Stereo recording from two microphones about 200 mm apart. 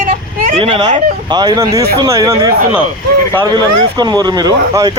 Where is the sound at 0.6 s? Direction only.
25° right (ahead or behind).